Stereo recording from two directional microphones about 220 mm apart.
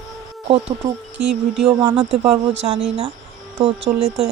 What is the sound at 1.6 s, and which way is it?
Speech, 25° right (ahead or behind).